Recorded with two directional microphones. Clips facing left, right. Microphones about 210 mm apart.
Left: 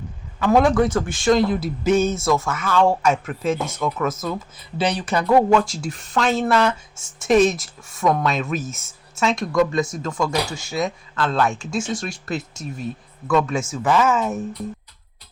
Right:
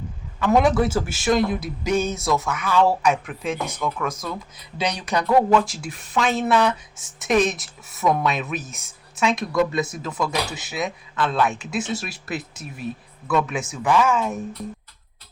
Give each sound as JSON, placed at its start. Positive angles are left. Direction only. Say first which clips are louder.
{"t": 0.3, "sound": "a man's voice", "louder": "left 2 dB", "side_deg": 5}
{"t": 0.6, "sound": "speech", "louder": "left 2 dB", "side_deg": -5}
{"t": 5.8, "sound": "speech", "louder": "left 2 dB", "side_deg": 0}